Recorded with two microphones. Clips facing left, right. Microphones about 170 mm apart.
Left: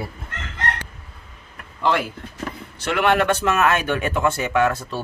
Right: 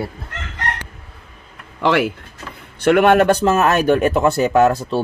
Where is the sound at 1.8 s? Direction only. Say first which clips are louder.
Right 5 dB; 80° right.